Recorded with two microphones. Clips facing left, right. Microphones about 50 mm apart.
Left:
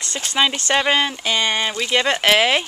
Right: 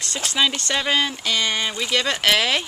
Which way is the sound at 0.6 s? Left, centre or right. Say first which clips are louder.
Left 4 dB; left.